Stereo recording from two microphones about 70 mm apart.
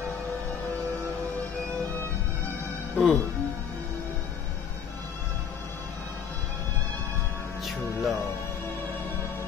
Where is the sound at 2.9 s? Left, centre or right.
Centre.